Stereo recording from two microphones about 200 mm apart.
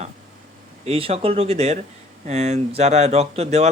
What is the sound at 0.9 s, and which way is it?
Speech, 30° right (ahead or behind).